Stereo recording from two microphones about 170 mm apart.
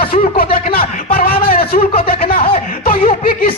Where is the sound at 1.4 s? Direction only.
60° left (ahead or behind).